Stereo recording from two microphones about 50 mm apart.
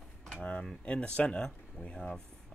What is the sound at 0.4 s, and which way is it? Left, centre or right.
Cutlery, left.